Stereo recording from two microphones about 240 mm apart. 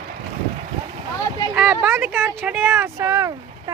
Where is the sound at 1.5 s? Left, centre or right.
Centre.